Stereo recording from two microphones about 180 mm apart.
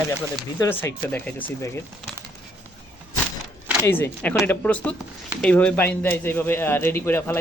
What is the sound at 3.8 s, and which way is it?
Speech, 10° left (ahead or behind).